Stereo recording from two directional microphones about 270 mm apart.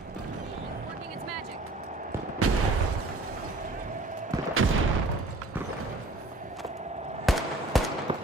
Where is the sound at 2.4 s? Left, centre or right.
Right.